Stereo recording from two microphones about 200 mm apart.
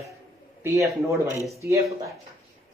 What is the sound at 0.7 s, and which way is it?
Speech, 15° right (ahead or behind).